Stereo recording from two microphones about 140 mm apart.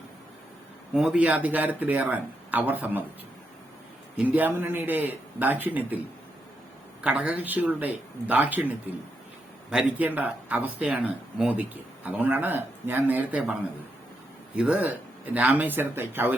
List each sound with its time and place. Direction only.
0.9 s speech: 5° right (ahead or behind)
4.2 s speech: 10° right (ahead or behind)
7.0 s speech: 10° right (ahead or behind)